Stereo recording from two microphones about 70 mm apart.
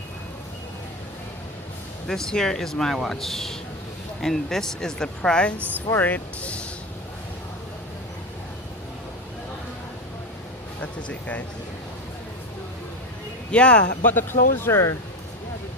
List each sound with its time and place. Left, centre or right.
2.0 s speech: centre
6.0 s speech: left
10.8 s speech: left
13.5 s speech: centre